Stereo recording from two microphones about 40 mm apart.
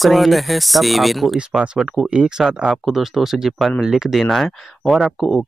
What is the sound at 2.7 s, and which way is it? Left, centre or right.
Speech, centre.